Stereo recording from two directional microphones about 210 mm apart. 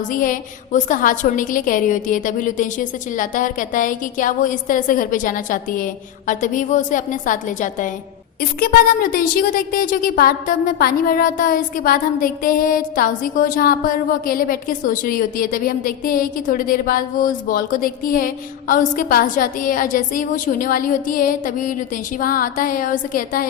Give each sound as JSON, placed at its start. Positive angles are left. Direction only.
{"t": 0.1, "sound": "a woman's voice", "side_deg": 40}